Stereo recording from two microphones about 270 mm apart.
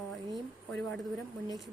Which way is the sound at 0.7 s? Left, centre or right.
Centre.